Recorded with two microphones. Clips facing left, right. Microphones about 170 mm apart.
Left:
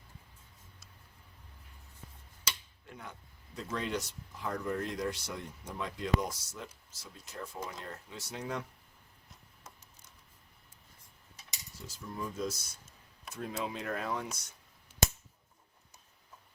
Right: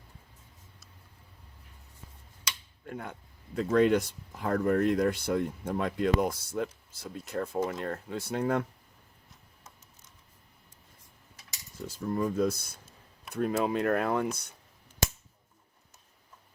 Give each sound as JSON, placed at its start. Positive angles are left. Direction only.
{"t": 2.8, "sound": "speech", "side_deg": -55}
{"t": 11.9, "sound": "speech", "side_deg": -55}